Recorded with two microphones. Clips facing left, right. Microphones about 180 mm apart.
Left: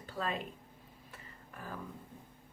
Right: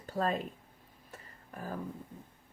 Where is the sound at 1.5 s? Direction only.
40° right (ahead or behind).